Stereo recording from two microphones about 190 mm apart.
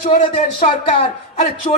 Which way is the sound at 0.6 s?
30° left (ahead or behind).